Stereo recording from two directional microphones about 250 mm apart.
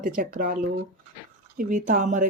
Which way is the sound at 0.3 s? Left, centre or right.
Right.